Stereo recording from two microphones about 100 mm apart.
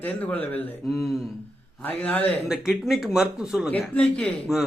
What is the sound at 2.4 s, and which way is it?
Speech, 5° right (ahead or behind).